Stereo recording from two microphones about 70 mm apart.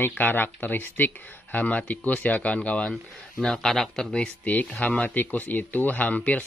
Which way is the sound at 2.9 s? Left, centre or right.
Centre.